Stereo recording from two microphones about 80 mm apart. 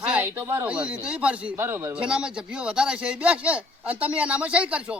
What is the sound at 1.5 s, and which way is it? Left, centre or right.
Speech, right.